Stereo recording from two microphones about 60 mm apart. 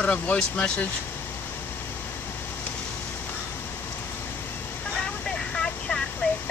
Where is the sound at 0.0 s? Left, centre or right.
Left.